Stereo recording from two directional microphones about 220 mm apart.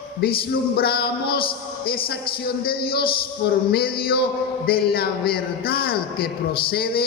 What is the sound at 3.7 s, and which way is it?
Speech, 45° left (ahead or behind).